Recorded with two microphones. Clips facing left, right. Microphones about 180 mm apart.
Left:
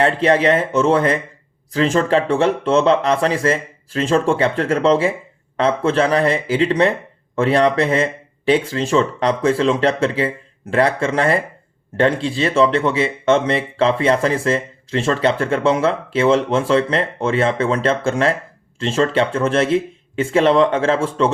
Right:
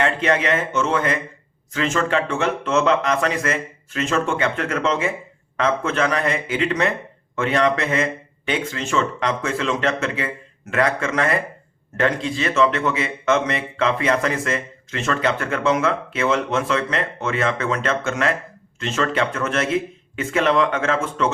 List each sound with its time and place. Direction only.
0.0 s speech: 35° left (ahead or behind)